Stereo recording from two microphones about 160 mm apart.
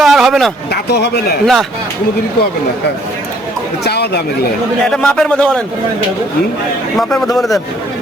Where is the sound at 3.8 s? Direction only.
90° left.